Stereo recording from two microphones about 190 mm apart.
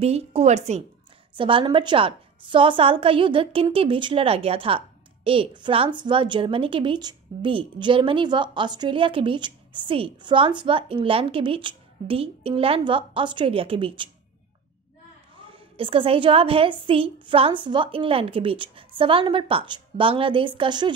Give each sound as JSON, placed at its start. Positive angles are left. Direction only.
{"t": 0.0, "sound": "a woman's voice", "side_deg": -35}
{"t": 15.5, "sound": "a woman's voice", "side_deg": -30}